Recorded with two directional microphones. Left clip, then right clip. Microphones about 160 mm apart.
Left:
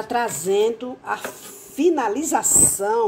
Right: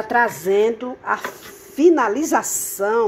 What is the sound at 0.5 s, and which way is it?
Speech, 15° left (ahead or behind).